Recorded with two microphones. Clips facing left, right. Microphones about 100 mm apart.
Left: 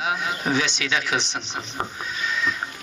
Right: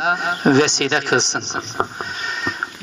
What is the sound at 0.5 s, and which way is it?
Speech, 65° right (ahead or behind).